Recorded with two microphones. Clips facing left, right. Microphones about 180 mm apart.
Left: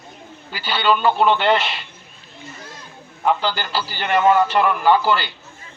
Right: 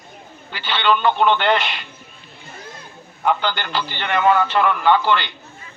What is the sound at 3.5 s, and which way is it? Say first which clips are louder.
Speech: even; 35° left (ahead or behind).